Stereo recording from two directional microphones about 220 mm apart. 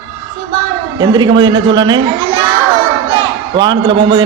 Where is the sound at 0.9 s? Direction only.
20° right (ahead or behind).